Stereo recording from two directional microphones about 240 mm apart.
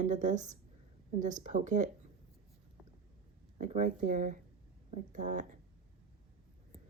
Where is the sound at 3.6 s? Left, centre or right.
Right.